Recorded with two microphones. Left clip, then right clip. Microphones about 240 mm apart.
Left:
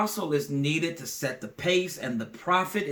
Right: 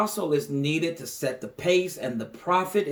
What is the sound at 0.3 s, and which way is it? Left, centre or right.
Speech, centre.